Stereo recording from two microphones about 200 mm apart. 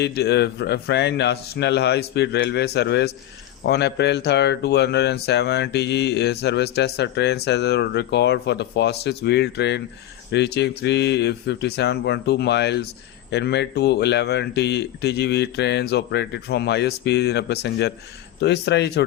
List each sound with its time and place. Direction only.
0.0 s speech: 55° left (ahead or behind)